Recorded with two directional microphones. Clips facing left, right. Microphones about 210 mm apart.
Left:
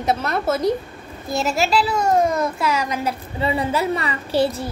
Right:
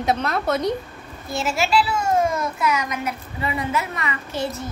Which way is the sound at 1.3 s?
40° left (ahead or behind).